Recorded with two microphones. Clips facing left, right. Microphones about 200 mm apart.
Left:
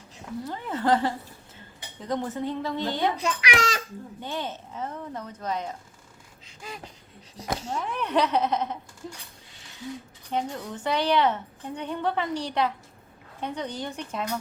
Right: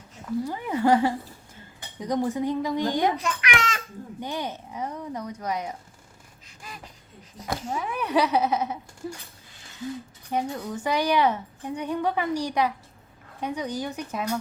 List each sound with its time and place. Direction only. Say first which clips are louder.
0.4 s a woman's voice: right 2 dB; 10° right (ahead or behind)
3.2 s a child's voice: left 1 dB; 35° left (ahead or behind)
4.2 s a woman's voice: right 2 dB; 15° right (ahead or behind)
6.6 s a sound: left 3 dB; 25° left (ahead or behind)
7.7 s a woman's voice: right 2 dB; 10° right (ahead or behind)
10.3 s a woman's voice: right 2 dB; 10° right (ahead or behind)